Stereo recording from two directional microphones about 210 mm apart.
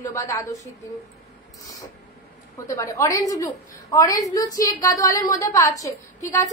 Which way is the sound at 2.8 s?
15° left (ahead or behind).